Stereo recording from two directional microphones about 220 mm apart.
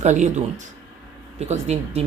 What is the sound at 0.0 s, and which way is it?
Speech, 35° right (ahead or behind).